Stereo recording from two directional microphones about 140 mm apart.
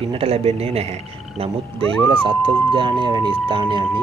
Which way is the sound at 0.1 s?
45° right (ahead or behind).